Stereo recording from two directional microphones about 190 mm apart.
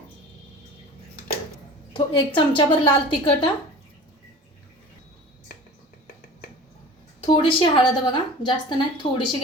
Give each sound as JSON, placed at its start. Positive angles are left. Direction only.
{"t": 1.9, "sound": "a woman's voice", "side_deg": 25}
{"t": 7.3, "sound": "a woman's voice", "side_deg": 25}